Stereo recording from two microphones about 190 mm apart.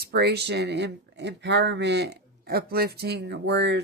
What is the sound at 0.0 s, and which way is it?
Speech, 55° right (ahead or behind).